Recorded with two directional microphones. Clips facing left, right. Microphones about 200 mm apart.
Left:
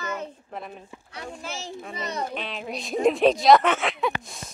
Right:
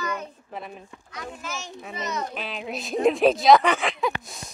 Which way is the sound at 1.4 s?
30° left (ahead or behind).